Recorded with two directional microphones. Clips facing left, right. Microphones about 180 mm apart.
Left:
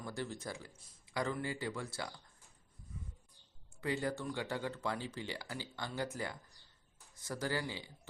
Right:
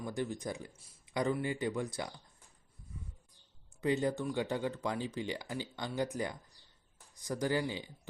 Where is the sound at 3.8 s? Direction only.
20° right (ahead or behind).